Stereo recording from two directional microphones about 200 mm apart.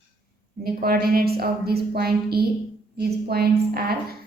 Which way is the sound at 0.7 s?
50° right (ahead or behind).